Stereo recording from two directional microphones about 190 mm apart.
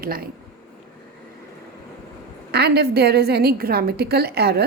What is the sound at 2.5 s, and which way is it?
A woman's voice, 60° right (ahead or behind).